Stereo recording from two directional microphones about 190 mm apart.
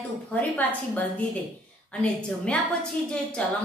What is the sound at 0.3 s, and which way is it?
A woman's voice, 10° left (ahead or behind).